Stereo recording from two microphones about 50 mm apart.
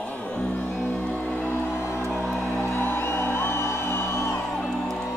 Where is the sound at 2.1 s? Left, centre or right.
Centre.